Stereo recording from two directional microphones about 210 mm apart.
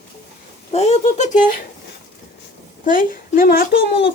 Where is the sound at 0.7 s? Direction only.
30° left (ahead or behind).